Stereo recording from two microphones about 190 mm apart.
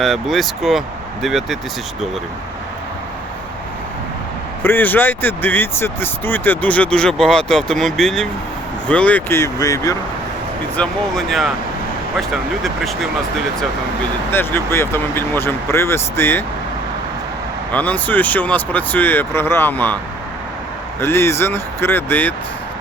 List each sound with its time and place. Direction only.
0.0 s speech: centre (ahead or behind)
4.6 s speech: 10° left (ahead or behind)
10.8 s speech: 5° left (ahead or behind)
14.3 s speech: 10° left (ahead or behind)
17.7 s speech: 10° left (ahead or behind)
21.0 s speech: 15° left (ahead or behind)